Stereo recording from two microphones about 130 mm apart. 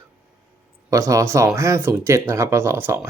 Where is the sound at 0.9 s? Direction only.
25° right (ahead or behind).